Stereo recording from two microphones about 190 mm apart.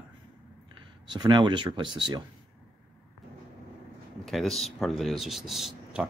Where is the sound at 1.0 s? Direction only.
25° right (ahead or behind).